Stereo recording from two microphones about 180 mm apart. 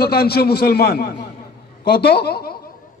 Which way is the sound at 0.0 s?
60° left (ahead or behind).